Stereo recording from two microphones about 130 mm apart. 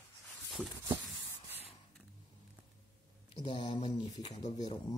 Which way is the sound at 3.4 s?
45° left (ahead or behind).